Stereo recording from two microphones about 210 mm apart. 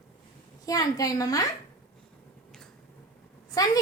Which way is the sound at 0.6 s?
15° left (ahead or behind).